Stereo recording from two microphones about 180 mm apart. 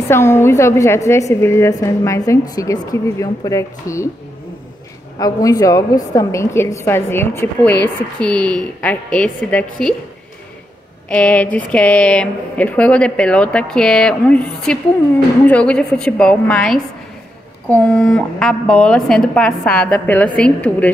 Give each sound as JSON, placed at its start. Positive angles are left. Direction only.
{"t": 0.1, "sound": "a woman's voice", "side_deg": 15}
{"t": 5.2, "sound": "a woman's voice", "side_deg": 20}
{"t": 11.1, "sound": "a woman's voice", "side_deg": 5}